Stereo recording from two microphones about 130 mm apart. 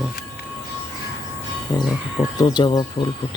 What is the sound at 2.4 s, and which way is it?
Speech, 35° left (ahead or behind).